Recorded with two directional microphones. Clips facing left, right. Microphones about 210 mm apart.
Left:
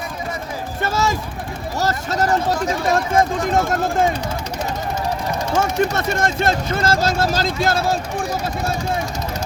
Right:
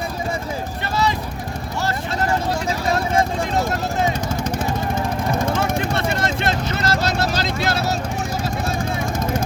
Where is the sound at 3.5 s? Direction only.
50° left (ahead or behind).